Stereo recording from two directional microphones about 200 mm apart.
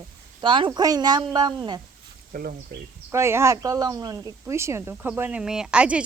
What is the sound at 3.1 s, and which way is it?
Speech, 15° right (ahead or behind).